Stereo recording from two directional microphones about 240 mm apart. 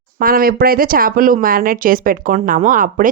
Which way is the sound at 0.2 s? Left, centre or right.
Right.